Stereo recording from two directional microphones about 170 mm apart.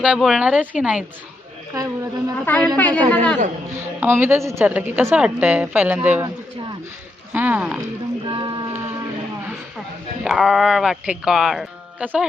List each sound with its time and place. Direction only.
0.0 s speech: 5° right (ahead or behind)
1.7 s speech: 20° right (ahead or behind)
2.4 s speech: 10° left (ahead or behind)
3.8 s a woman's voice: 15° right (ahead or behind)
7.3 s a woman's voice: 10° right (ahead or behind)
8.2 s a sound: 30° right (ahead or behind)
10.2 s speech: centre (ahead or behind)